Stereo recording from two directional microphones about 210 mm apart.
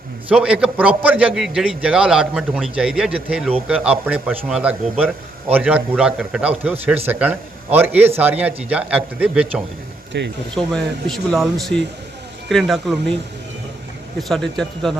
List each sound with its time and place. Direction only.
0.3 s a man's voice: 5° right (ahead or behind)
10.1 s speech: 55° right (ahead or behind)
10.5 s a man's voice: 5° left (ahead or behind)
14.2 s a man's voice: centre (ahead or behind)